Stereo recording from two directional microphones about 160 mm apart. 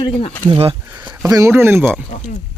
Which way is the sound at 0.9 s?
15° right (ahead or behind).